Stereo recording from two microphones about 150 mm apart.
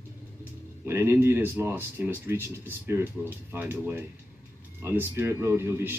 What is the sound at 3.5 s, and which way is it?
A man's voice, 15° right (ahead or behind).